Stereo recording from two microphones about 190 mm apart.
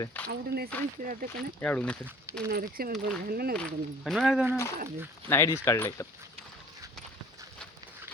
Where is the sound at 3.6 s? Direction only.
Centre (ahead or behind).